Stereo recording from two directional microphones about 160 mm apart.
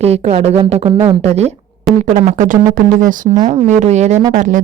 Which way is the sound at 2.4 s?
55° right (ahead or behind).